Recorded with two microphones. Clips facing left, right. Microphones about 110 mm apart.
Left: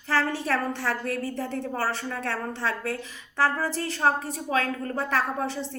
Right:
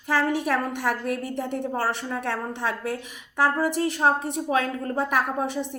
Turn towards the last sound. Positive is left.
turn(degrees=-15)  # may be behind; listen again after turning